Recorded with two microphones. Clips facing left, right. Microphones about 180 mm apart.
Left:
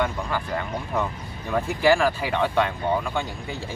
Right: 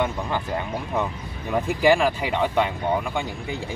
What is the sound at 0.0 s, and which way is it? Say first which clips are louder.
Speech: right 1 dB; 20° right (ahead or behind).